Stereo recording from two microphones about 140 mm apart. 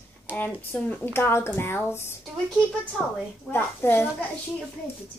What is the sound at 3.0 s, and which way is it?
Speech, 5° right (ahead or behind).